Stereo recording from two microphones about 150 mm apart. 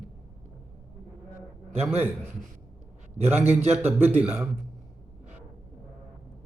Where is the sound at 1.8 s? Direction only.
15° right (ahead or behind).